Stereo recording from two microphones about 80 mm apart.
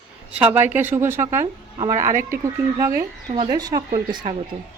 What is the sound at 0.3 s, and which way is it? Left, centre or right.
Speech, right.